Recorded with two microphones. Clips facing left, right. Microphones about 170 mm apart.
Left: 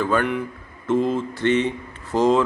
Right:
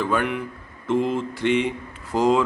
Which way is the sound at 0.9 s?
35° left (ahead or behind).